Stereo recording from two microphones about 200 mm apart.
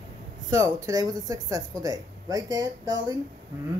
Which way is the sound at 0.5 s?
15° right (ahead or behind).